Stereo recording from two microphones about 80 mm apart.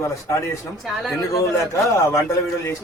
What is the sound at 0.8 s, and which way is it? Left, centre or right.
Speech, centre.